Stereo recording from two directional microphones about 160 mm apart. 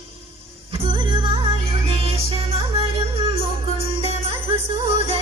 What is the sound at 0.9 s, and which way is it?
Music, 30° right (ahead or behind).